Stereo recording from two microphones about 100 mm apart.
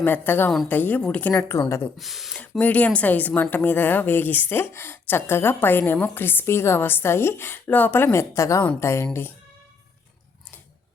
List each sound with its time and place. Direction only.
0.0 s a woman's voice: 20° left (ahead or behind)
1.3 s speech: 30° left (ahead or behind)
2.0 s speech: centre (ahead or behind)
2.3 s speech: 15° left (ahead or behind)